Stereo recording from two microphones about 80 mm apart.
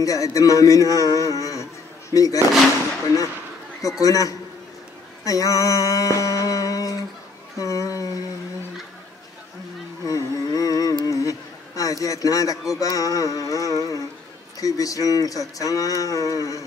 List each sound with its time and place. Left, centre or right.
0.0 s a man's voice: left
4.0 s speech: left
5.2 s a sound: left
10.0 s carnatic music: left
11.1 s a man's voice: left